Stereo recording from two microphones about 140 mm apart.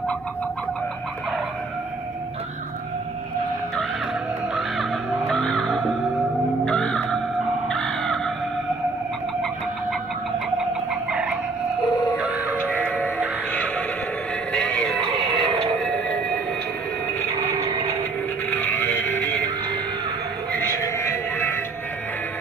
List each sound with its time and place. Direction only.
4.6 s music: centre (ahead or behind)
6.6 s crow: 5° left (ahead or behind)
10.6 s chicken: 5° right (ahead or behind)
12.2 s music: 10° right (ahead or behind)
12.6 s music: 10° left (ahead or behind)
15.3 s a sound: 10° left (ahead or behind)
18.5 s music: 15° left (ahead or behind)
20.8 s a sound: 20° left (ahead or behind)